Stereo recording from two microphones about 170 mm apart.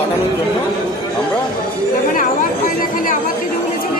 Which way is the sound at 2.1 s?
55° left (ahead or behind).